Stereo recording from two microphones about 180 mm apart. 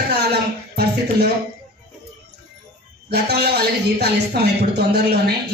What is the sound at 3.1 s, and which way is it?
Speech, 65° right (ahead or behind).